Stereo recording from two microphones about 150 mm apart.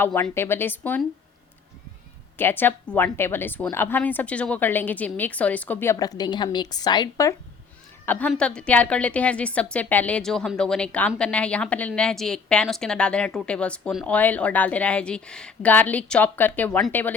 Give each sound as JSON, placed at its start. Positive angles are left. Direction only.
{"t": 0.0, "sound": "a woman's voice", "side_deg": 15}
{"t": 2.4, "sound": "a woman's voice", "side_deg": 15}
{"t": 8.0, "sound": "a woman's voice", "side_deg": 10}